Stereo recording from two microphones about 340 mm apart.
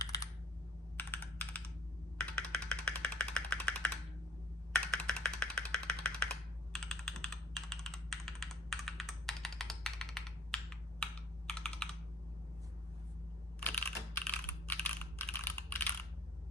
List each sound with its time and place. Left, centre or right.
0.0 s computer keyboard: centre
2.1 s a sound: centre
6.7 s computer keyboard: centre
13.7 s computer keyboard: centre